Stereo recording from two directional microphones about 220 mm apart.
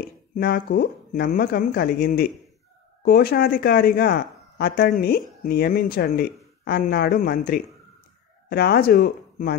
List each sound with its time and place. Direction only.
0.3 s speech: 40° left (ahead or behind)